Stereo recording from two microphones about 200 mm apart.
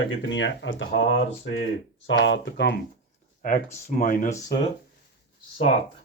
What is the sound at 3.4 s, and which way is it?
Speech, 40° left (ahead or behind).